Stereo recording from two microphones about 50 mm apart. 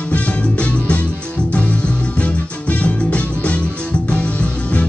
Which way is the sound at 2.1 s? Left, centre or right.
Left.